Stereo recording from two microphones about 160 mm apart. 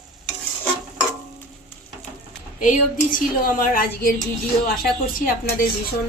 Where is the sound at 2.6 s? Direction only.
55° left (ahead or behind).